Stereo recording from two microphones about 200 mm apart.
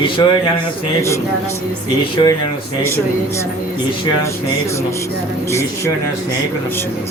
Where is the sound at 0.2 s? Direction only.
20° left (ahead or behind).